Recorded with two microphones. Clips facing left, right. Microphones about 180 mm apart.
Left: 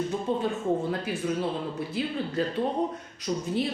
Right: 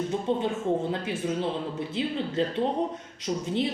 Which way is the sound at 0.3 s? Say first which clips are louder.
Even; 25° right (ahead or behind).